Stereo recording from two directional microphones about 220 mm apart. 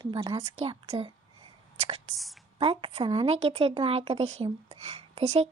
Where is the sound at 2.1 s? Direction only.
Centre (ahead or behind).